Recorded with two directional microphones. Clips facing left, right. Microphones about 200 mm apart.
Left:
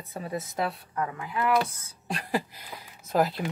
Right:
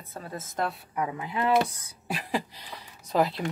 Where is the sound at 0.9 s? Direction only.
15° right (ahead or behind).